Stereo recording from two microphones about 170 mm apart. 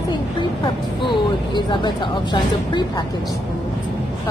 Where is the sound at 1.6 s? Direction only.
25° left (ahead or behind).